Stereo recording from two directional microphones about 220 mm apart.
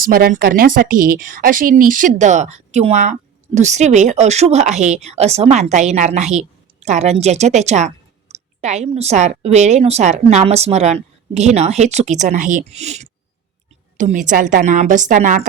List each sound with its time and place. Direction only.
0.0 s a woman's voice: 45° right (ahead or behind)